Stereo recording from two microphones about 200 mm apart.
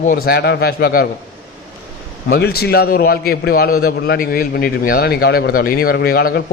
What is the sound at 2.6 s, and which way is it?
A man's voice, 50° left (ahead or behind).